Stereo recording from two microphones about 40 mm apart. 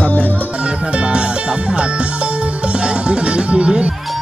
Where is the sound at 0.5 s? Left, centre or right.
Right.